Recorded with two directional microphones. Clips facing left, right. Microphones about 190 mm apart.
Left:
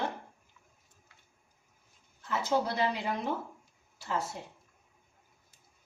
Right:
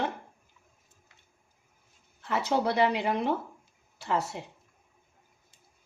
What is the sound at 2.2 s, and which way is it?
Speech, 70° right (ahead or behind).